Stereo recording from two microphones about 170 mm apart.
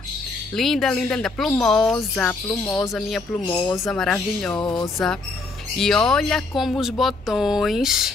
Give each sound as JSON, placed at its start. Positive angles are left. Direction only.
{"t": 0.6, "sound": "speech", "side_deg": 0}
{"t": 2.8, "sound": "speech", "side_deg": 0}
{"t": 3.4, "sound": "speech", "side_deg": 20}
{"t": 3.8, "sound": "speech", "side_deg": 5}
{"t": 4.6, "sound": "speech", "side_deg": 25}
{"t": 5.8, "sound": "speech", "side_deg": 5}